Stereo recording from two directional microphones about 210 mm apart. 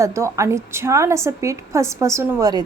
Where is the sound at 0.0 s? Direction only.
15° right (ahead or behind).